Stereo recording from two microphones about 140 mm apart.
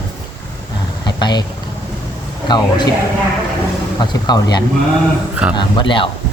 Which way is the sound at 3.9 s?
30° left (ahead or behind).